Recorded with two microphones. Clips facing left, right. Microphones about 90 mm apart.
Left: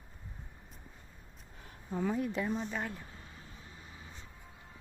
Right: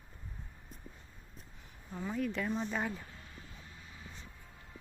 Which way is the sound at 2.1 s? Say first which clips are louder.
Left 1 dB; 15° left (ahead or behind).